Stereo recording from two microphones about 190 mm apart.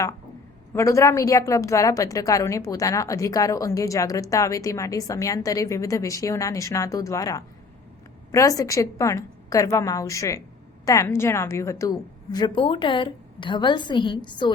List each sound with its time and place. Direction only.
0.7 s a woman's voice: 15° left (ahead or behind)